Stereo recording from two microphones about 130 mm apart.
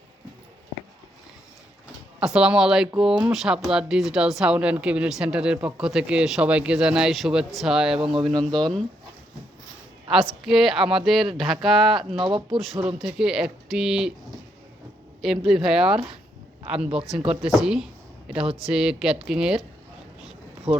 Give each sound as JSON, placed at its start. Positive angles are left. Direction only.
{"t": 2.2, "sound": "speech", "side_deg": -5}
{"t": 8.3, "sound": "speech", "side_deg": -35}
{"t": 8.5, "sound": "speech", "side_deg": 5}
{"t": 10.4, "sound": "speech", "side_deg": 0}
{"t": 12.1, "sound": "speech", "side_deg": -40}
{"t": 13.0, "sound": "speech", "side_deg": -5}
{"t": 15.2, "sound": "speech", "side_deg": -5}
{"t": 20.7, "sound": "speech", "side_deg": -5}